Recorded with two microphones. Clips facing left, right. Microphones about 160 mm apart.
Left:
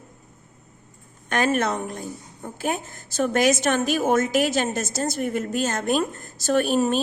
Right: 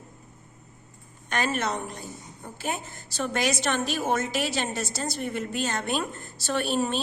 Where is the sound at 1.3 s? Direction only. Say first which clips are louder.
Left 5 dB; 50° left (ahead or behind).